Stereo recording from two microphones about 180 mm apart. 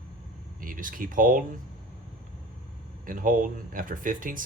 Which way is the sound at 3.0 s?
50° right (ahead or behind).